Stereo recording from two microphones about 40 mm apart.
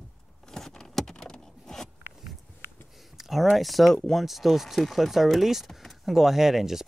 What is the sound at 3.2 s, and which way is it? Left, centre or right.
Speech, centre.